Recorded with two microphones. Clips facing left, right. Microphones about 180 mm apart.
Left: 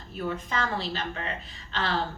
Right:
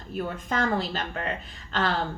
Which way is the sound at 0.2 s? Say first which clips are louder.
Right 2 dB; 45° right (ahead or behind).